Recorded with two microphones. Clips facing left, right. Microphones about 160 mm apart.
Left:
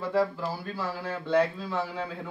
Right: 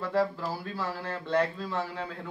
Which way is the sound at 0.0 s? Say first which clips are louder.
Left 1 dB; centre (ahead or behind).